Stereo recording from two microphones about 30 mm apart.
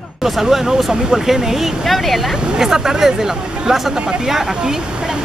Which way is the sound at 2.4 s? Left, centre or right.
Right.